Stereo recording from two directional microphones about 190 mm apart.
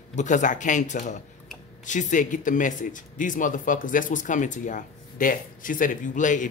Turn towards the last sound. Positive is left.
turn(degrees=40)  # may be behind; listen again after turning